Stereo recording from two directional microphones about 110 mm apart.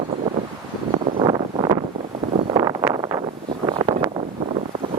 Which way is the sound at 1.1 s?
50° right (ahead or behind).